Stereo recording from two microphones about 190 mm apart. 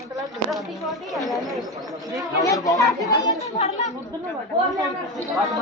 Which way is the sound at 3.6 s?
35° left (ahead or behind).